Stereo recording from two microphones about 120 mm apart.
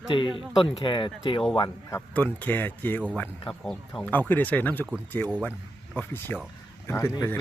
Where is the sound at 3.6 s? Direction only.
5° left (ahead or behind).